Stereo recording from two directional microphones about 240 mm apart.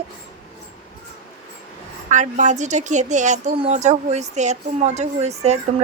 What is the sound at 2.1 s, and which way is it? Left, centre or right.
A woman's voice, right.